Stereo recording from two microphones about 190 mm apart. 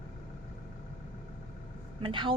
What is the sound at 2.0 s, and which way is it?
Speech, 25° right (ahead or behind).